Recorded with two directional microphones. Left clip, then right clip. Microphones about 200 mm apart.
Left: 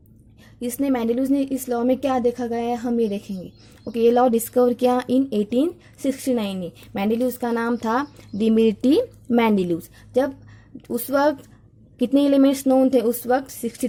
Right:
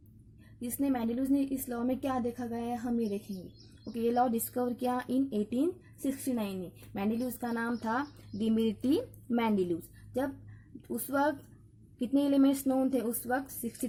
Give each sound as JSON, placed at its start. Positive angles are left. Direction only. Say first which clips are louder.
{"t": 0.6, "sound": "speech", "louder": "left 10 dB", "side_deg": 40}